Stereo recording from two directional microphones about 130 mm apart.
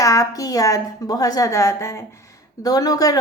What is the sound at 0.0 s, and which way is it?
A woman's voice, 25° left (ahead or behind).